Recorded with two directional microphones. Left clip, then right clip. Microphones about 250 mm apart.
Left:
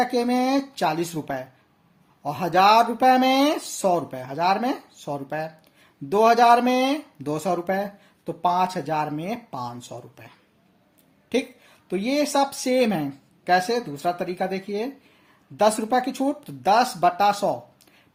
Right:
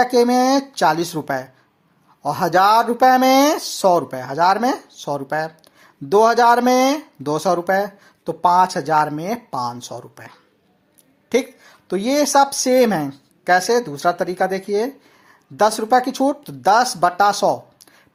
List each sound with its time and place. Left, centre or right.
0.0 s a woman's voice: centre